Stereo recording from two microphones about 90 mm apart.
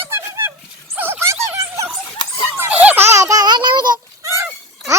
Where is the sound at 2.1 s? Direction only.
65° left (ahead or behind).